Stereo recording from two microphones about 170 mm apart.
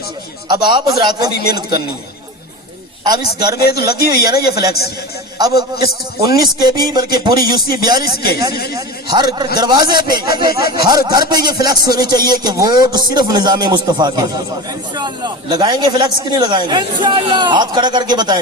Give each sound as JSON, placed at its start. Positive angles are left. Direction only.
{"t": 0.4, "sound": "speech", "side_deg": -25}
{"t": 1.3, "sound": "speech", "side_deg": 65}
{"t": 3.0, "sound": "speech", "side_deg": -25}
{"t": 3.6, "sound": "speech", "side_deg": 65}
{"t": 5.7, "sound": "a man's voice", "side_deg": 65}
{"t": 6.6, "sound": "speech", "side_deg": -25}
{"t": 8.1, "sound": "a man's voice", "side_deg": 65}
{"t": 8.7, "sound": "speech", "side_deg": -25}